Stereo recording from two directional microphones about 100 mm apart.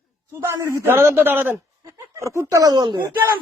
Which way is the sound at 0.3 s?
30° right (ahead or behind).